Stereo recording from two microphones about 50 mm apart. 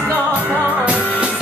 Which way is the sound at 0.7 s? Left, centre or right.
Right.